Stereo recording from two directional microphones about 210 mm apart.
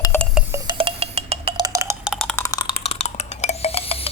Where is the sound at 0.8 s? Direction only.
25° right (ahead or behind).